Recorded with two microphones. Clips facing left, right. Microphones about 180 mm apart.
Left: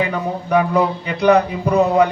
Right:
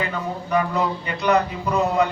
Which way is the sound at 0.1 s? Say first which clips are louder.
Left 5 dB; 65° left (ahead or behind).